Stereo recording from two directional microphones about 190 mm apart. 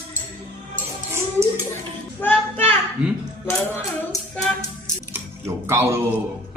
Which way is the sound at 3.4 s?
10° left (ahead or behind).